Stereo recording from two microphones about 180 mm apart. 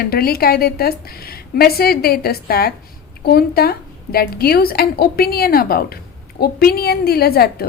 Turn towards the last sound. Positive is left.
turn(degrees=60)  # may be behind; listen again after turning